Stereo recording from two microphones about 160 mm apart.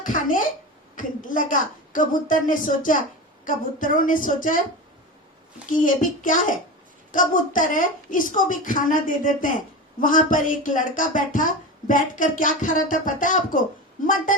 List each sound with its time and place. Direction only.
0.0 s a sound: 55° left (ahead or behind)
0.9 s a woman's voice: 55° left (ahead or behind)
5.6 s speech: 55° left (ahead or behind)